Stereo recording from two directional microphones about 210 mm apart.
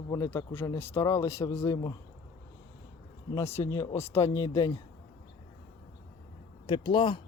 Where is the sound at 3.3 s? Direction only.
10° left (ahead or behind).